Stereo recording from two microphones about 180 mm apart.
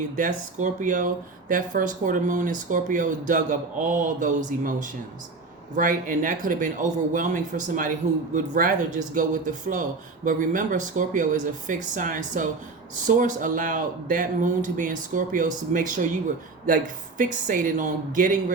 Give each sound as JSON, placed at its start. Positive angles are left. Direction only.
{"t": 0.2, "sound": "speech", "side_deg": -45}